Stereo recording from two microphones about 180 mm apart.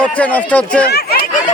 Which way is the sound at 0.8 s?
65° left (ahead or behind).